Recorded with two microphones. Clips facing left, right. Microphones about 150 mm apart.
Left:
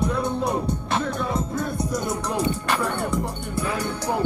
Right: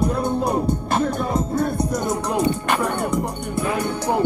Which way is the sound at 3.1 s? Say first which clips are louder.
Right 3 dB; 20° right (ahead or behind).